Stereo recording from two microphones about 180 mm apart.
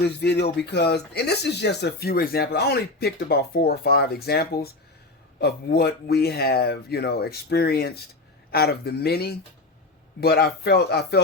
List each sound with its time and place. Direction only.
0.0 s speech: 65° left (ahead or behind)